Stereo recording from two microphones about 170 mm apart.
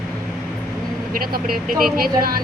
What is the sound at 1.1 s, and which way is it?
Speech, 60° right (ahead or behind).